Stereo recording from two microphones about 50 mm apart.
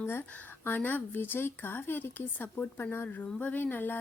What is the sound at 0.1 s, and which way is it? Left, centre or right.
A woman's voice, left.